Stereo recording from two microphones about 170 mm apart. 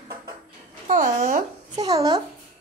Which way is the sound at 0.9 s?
50° right (ahead or behind).